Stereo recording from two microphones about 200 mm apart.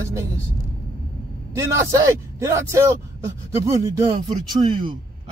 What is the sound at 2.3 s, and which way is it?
Speech, 15° right (ahead or behind).